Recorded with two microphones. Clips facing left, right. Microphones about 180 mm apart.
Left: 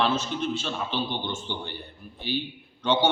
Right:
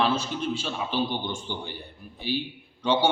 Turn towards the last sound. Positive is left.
turn(degrees=-10)  # may be behind; listen again after turning